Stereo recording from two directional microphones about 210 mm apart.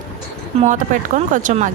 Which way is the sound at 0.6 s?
35° right (ahead or behind).